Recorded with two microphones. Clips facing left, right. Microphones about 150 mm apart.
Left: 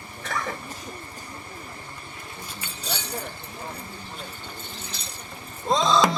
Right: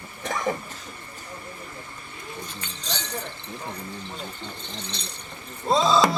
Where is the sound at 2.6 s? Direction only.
10° left (ahead or behind).